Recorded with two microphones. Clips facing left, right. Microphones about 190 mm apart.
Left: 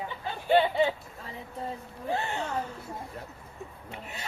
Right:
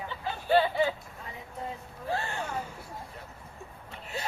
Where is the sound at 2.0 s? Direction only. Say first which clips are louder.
Left 2 dB; 20° left (ahead or behind).